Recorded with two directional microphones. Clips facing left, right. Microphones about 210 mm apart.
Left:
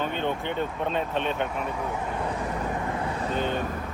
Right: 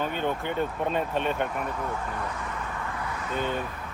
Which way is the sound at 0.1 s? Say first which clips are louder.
Even; 10° right (ahead or behind).